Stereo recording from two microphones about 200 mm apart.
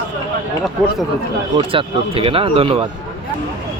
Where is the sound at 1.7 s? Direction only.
25° right (ahead or behind).